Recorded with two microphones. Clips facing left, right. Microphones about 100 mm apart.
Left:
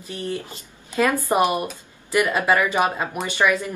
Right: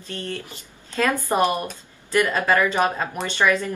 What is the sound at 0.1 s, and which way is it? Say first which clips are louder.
A woman's voice: left 3 dB; 15° left (ahead or behind).